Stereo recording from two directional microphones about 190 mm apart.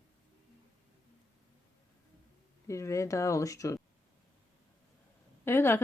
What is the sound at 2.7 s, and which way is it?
Speech, 15° left (ahead or behind).